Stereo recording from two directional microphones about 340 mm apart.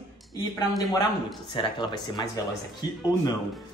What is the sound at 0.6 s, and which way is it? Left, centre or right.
Speech, centre.